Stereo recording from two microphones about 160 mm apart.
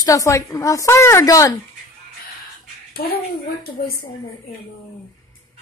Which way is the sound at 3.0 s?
70° left (ahead or behind).